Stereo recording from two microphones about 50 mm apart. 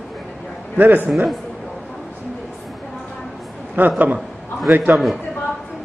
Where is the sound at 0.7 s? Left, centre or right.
Right.